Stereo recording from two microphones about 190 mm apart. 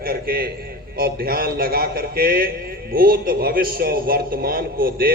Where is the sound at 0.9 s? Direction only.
50° right (ahead or behind).